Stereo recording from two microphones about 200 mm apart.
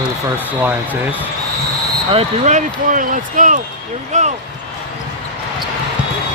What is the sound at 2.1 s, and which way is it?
Speech, 35° right (ahead or behind).